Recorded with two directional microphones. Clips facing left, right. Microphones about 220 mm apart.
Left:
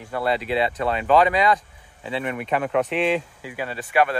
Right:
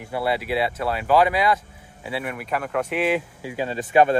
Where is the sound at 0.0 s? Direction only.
10° right (ahead or behind).